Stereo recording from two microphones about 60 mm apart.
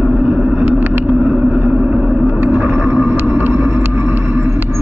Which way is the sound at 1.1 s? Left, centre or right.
Centre.